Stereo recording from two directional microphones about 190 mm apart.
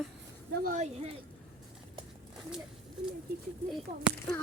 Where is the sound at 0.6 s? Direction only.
40° right (ahead or behind).